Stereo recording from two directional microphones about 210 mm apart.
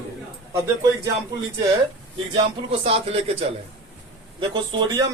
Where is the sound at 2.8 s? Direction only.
30° right (ahead or behind).